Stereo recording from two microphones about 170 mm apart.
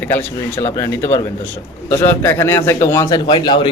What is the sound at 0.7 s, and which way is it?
A man's voice, 20° left (ahead or behind).